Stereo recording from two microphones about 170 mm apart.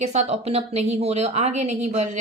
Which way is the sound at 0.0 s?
40° right (ahead or behind).